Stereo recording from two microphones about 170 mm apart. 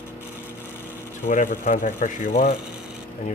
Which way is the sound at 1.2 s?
55° left (ahead or behind).